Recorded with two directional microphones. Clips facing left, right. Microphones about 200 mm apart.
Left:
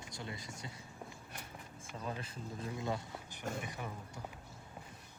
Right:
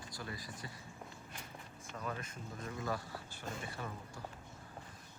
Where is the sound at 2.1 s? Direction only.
30° left (ahead or behind); by 3.9 s 15° left (ahead or behind).